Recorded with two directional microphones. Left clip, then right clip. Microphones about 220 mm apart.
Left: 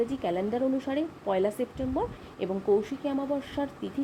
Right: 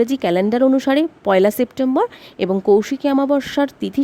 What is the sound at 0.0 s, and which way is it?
A woman's voice, 45° right (ahead or behind).